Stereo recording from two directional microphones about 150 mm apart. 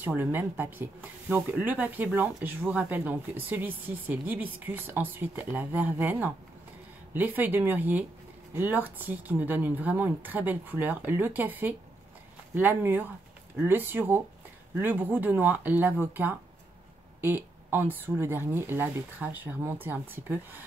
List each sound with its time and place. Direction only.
0.0 s speech: 15° right (ahead or behind)